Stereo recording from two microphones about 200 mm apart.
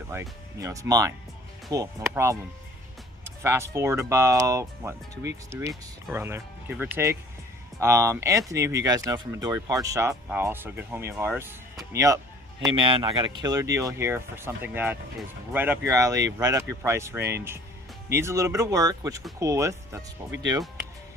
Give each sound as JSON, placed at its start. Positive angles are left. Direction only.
{"t": 0.1, "sound": "speech", "side_deg": -15}